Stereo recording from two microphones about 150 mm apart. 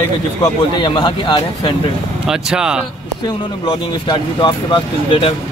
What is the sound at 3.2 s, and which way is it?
Speech, 30° left (ahead or behind).